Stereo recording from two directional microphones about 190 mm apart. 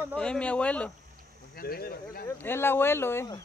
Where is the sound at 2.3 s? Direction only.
10° left (ahead or behind).